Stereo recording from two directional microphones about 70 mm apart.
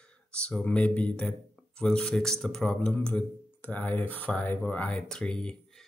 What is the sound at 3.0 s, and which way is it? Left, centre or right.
Speech, left.